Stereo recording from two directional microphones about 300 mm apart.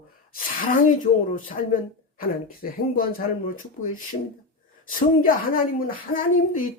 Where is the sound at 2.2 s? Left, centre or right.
Left.